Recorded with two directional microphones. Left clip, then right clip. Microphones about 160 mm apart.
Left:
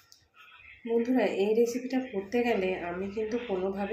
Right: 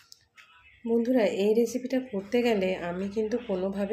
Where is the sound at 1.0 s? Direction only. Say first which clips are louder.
Right 4 dB; 45° right (ahead or behind).